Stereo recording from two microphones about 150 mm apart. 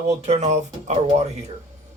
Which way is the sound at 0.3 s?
50° right (ahead or behind).